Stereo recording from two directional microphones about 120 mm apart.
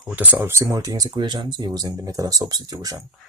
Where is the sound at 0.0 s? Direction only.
10° right (ahead or behind); by 3.1 s 30° right (ahead or behind).